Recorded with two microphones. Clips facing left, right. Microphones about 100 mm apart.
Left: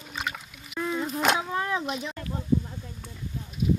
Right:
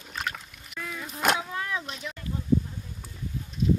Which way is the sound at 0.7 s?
30° left (ahead or behind).